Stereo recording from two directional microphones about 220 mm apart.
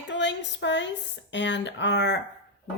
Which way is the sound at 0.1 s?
55° left (ahead or behind).